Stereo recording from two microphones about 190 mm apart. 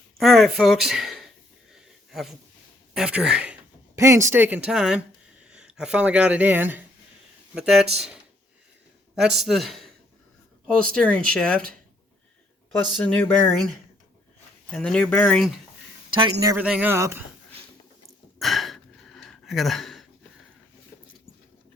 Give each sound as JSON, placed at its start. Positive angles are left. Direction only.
{"t": 0.2, "sound": "speech", "side_deg": 0}
{"t": 1.7, "sound": "a sound", "side_deg": 0}
{"t": 2.9, "sound": "speech", "side_deg": -5}
{"t": 10.9, "sound": "speech", "side_deg": 5}
{"t": 12.9, "sound": "speech", "side_deg": 5}
{"t": 14.7, "sound": "speech", "side_deg": 5}
{"t": 16.1, "sound": "speech", "side_deg": -20}
{"t": 16.6, "sound": "speech", "side_deg": -5}
{"t": 18.3, "sound": "gasp", "side_deg": 0}